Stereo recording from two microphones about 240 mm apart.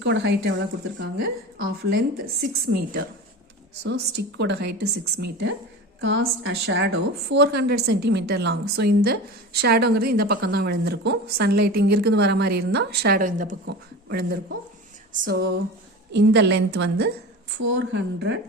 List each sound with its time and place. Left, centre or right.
0.0 s a woman's voice: right